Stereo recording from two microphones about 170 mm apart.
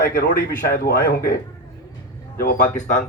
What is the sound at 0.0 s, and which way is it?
Speech, 65° left (ahead or behind).